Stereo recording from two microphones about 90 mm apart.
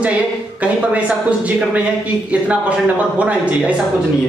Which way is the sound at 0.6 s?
15° right (ahead or behind).